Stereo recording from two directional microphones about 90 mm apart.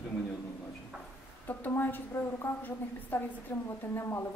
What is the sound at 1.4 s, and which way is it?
A woman's voice, 20° left (ahead or behind).